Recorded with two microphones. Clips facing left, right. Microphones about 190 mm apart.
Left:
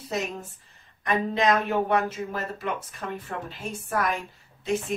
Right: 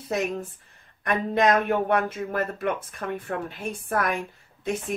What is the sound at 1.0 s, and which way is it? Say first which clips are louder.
Speech: right 1 dB; 50° right (ahead or behind).